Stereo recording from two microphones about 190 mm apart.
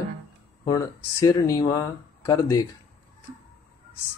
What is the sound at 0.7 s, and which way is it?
Speech, 20° left (ahead or behind).